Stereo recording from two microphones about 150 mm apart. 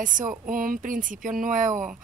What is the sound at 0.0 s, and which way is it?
A woman's voice, 60° right (ahead or behind).